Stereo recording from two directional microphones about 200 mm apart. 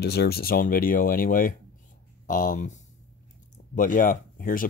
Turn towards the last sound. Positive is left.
turn(degrees=45)  # may be behind; listen again after turning